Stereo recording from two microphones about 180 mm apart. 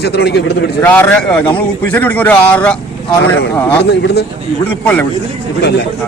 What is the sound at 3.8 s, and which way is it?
Speech, 65° left (ahead or behind).